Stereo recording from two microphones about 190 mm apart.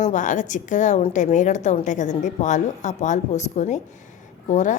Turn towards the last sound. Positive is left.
turn(degrees=40)  # may be behind; listen again after turning